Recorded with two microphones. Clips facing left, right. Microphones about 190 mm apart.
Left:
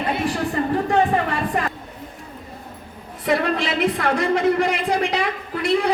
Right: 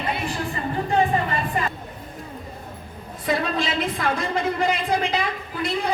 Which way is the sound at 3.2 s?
70° left (ahead or behind).